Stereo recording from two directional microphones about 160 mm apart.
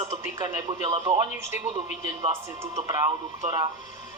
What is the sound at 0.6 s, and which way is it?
Speech, 35° right (ahead or behind).